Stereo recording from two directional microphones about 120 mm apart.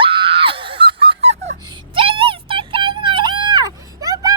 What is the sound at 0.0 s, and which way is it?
Music, 45° right (ahead or behind).